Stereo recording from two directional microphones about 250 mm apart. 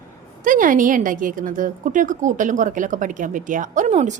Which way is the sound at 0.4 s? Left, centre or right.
Right.